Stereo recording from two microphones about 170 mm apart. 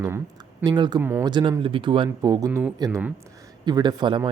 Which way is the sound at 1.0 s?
15° right (ahead or behind).